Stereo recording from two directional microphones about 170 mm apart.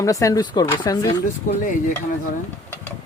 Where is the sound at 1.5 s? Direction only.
50° left (ahead or behind).